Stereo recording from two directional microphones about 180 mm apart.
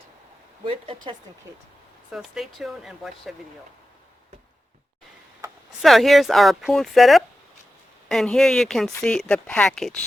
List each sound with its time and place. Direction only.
0.6 s speech: 30° right (ahead or behind)
2.0 s speech: centre (ahead or behind)
5.8 s speech: centre (ahead or behind)